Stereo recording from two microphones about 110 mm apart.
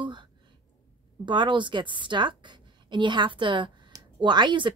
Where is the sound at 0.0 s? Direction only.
45° right (ahead or behind).